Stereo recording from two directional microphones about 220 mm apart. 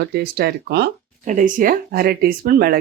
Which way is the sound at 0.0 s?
45° right (ahead or behind).